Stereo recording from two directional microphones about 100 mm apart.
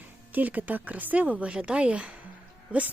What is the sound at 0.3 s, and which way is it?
Speech, 15° right (ahead or behind).